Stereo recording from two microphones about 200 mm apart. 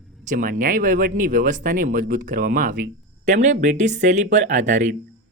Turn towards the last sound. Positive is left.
turn(degrees=-35)  # may be behind; listen again after turning